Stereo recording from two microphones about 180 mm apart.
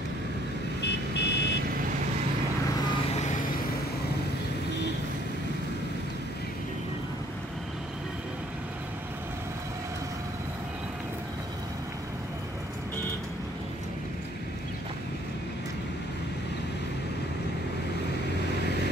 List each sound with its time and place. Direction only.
0.8 s vehicle: 70° left (ahead or behind)
3.1 s vehicle: 40° left (ahead or behind)